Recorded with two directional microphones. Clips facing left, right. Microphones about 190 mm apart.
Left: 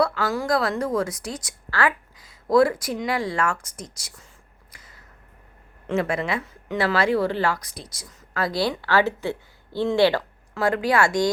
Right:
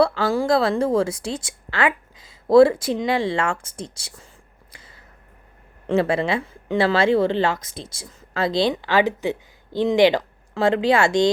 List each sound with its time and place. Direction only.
0.0 s speech: 30° right (ahead or behind)
4.7 s a sound: 30° right (ahead or behind)
5.9 s speech: 30° right (ahead or behind)